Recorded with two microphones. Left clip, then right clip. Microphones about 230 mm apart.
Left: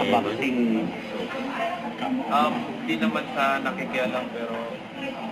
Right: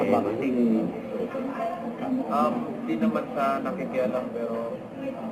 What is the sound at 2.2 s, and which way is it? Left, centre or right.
Speech, left.